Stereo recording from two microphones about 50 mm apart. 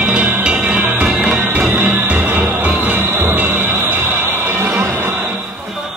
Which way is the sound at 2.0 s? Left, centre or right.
Right.